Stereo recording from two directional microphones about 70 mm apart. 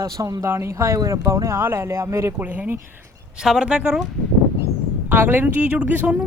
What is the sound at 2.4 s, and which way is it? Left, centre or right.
Speech, right.